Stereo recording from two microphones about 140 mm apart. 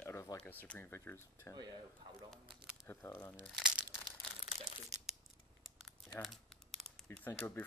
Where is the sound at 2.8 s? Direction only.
15° left (ahead or behind).